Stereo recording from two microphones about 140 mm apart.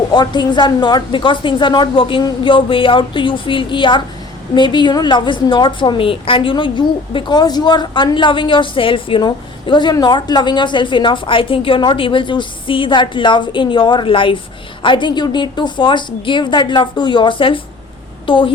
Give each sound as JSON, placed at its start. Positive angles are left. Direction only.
{"t": 0.1, "sound": "a woman's voice", "side_deg": 30}